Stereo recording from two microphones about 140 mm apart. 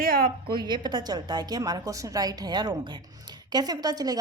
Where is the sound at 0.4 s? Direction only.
35° right (ahead or behind).